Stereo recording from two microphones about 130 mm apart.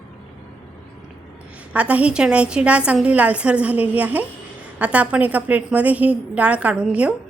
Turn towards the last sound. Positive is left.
turn(degrees=-10)  # may be behind; listen again after turning